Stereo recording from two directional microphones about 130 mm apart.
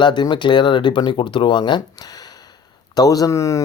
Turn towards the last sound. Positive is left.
turn(degrees=25)  # may be behind; listen again after turning